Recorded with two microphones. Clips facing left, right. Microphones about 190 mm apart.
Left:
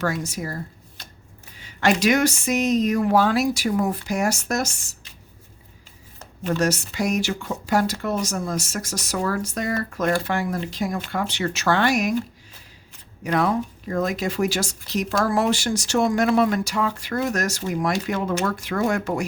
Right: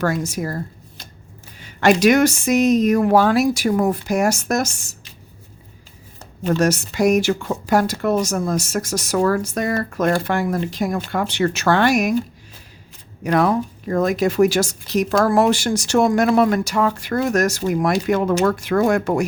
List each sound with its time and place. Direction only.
0.0 s speech: 50° right (ahead or behind)
1.6 s speech: 50° right (ahead or behind)
6.4 s speech: 50° right (ahead or behind)
13.2 s speech: 50° right (ahead or behind)